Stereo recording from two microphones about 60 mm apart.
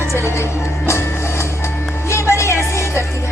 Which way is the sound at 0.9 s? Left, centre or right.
Left.